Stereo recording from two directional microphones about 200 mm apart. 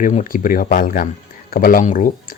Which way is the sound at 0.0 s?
40° left (ahead or behind).